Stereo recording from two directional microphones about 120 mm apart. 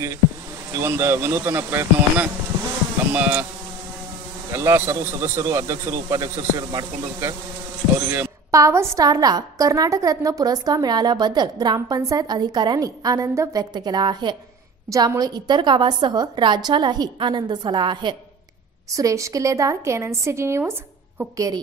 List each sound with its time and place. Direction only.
0.7 s a man's voice: 20° right (ahead or behind)
4.5 s a man's voice: 20° right (ahead or behind); by 18.1 s 40° right (ahead or behind)
18.9 s a man's voice: 30° right (ahead or behind)